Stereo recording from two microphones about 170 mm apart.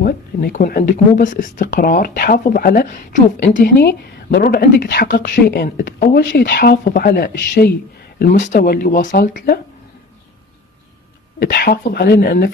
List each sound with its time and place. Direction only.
0.0 s speech: 60° left (ahead or behind)
8.2 s speech: 50° left (ahead or behind)
11.3 s speech: 65° left (ahead or behind)